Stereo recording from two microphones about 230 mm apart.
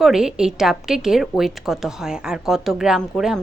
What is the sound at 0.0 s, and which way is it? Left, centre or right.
A woman's voice, centre.